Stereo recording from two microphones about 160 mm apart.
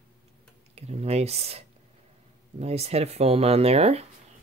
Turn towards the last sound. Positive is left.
turn(degrees=-40)  # may be behind; listen again after turning